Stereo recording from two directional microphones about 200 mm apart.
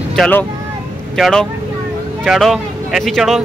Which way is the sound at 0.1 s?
5° left (ahead or behind).